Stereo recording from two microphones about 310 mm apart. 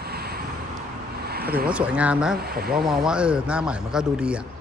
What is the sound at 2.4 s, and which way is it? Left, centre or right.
Speech, right.